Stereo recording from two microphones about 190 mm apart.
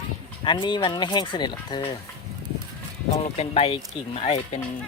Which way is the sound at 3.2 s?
35° left (ahead or behind).